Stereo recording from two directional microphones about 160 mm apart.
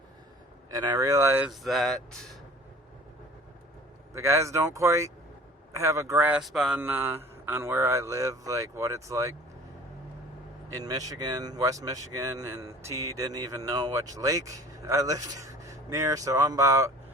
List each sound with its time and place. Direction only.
0.7 s speech: 20° right (ahead or behind)
1.5 s speech: centre (ahead or behind)
4.1 s speech: 20° right (ahead or behind)
6.4 s speech: centre (ahead or behind)
6.8 s speech: 15° right (ahead or behind)
10.8 s speech: 20° right (ahead or behind)